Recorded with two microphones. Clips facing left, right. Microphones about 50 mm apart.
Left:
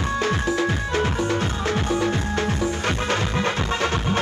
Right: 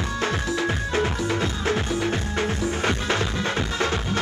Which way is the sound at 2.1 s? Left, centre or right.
Centre.